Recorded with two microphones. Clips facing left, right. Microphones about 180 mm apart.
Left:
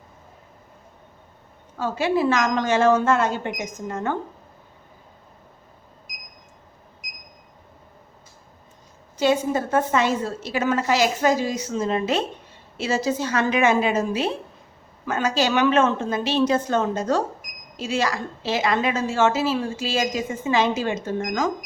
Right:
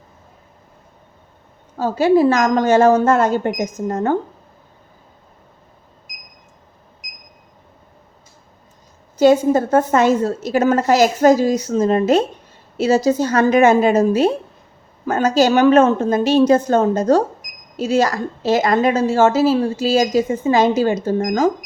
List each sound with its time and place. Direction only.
1.8 s a woman's voice: 40° right (ahead or behind)
9.1 s a woman's voice: 40° right (ahead or behind)